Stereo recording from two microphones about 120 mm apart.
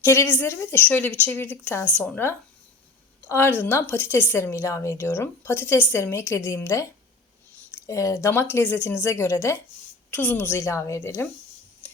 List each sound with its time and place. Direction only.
0.0 s a woman's voice: 20° left (ahead or behind)